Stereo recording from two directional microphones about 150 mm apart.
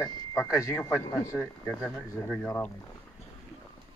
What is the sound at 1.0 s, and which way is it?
Speech, 20° left (ahead or behind).